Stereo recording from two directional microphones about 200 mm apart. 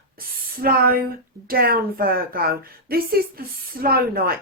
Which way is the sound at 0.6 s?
45° right (ahead or behind).